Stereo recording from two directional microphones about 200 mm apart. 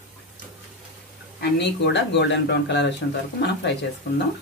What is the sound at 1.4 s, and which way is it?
Speech, 55° left (ahead or behind).